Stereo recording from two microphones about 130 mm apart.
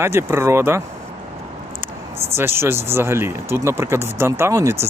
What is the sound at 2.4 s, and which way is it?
Speech, 20° right (ahead or behind).